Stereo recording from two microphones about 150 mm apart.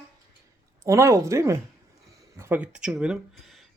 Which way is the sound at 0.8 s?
20° right (ahead or behind).